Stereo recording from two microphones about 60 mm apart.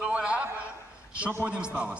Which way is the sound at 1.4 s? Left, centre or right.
Centre.